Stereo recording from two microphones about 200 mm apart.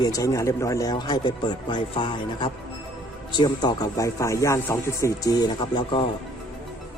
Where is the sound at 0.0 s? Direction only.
15° left (ahead or behind).